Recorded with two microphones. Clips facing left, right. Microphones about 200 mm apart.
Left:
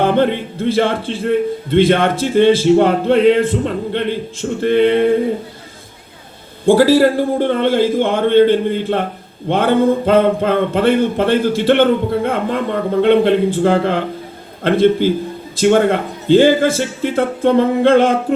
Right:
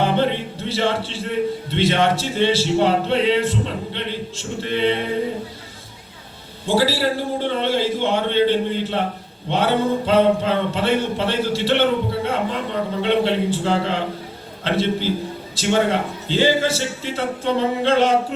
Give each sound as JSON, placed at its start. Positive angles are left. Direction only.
{"t": 0.0, "sound": "a man's voice", "side_deg": 50}
{"t": 6.7, "sound": "a man's voice", "side_deg": 50}